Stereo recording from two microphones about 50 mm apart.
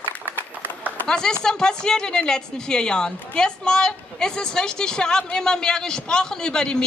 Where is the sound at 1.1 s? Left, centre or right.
Centre.